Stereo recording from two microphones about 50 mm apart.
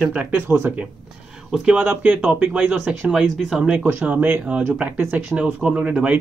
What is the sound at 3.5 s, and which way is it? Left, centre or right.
Speech, centre.